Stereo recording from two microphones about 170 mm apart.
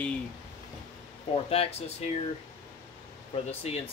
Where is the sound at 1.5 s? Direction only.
35° left (ahead or behind).